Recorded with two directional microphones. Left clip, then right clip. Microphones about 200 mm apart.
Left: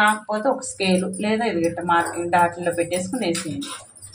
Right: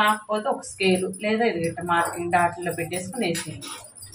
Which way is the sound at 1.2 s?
30° left (ahead or behind).